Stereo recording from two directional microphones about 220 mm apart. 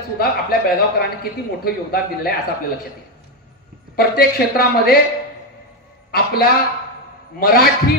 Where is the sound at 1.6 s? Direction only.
45° left (ahead or behind).